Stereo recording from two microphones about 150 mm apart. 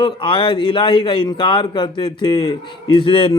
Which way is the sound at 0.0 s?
35° left (ahead or behind).